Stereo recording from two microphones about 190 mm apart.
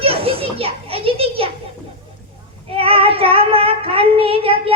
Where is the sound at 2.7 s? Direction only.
30° right (ahead or behind).